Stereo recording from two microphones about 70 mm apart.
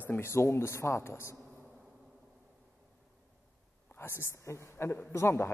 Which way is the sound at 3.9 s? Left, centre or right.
Left.